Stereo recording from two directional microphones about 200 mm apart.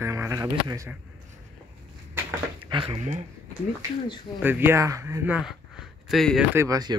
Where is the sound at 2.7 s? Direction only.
25° right (ahead or behind).